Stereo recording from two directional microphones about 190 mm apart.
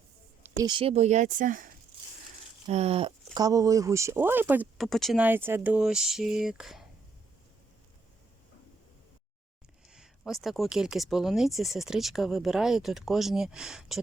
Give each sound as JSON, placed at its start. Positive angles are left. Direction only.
{"t": 0.4, "sound": "speech", "side_deg": -20}
{"t": 2.6, "sound": "speech", "side_deg": -35}
{"t": 3.3, "sound": "speech", "side_deg": -20}
{"t": 4.9, "sound": "speech", "side_deg": 0}
{"t": 5.2, "sound": "speech", "side_deg": -10}
{"t": 9.9, "sound": "a sound", "side_deg": -5}
{"t": 10.4, "sound": "speech", "side_deg": 0}